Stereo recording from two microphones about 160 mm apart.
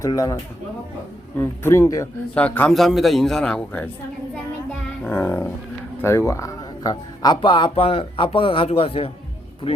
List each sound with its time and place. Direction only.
0.0 s a man's voice: 20° left (ahead or behind)
1.4 s a man's voice: 15° left (ahead or behind)
2.3 s a man's voice: 10° left (ahead or behind)
4.7 s a sound: 10° left (ahead or behind)
6.0 s a man's voice: 15° left (ahead or behind); by 9.1 s 35° left (ahead or behind)